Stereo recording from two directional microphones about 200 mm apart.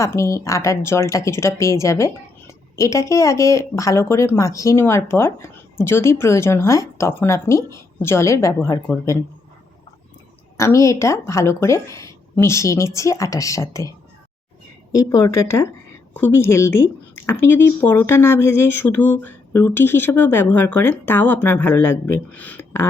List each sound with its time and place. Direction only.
0.0 s a woman's voice: 15° left (ahead or behind)
10.6 s a woman's voice: 15° left (ahead or behind)
14.9 s a woman's voice: 15° left (ahead or behind)